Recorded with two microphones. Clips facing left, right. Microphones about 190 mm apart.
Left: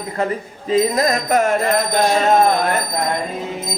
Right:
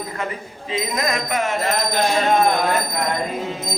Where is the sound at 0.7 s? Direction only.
40° left (ahead or behind).